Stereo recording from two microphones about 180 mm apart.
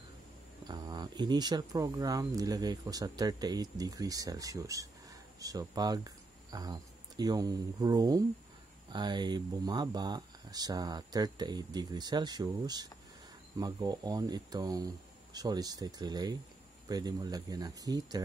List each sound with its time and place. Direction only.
0.7 s speech: 25° right (ahead or behind)